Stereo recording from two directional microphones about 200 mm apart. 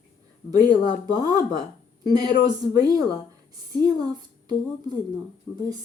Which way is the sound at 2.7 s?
20° right (ahead or behind).